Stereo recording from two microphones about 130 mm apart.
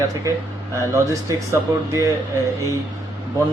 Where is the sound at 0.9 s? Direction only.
25° right (ahead or behind).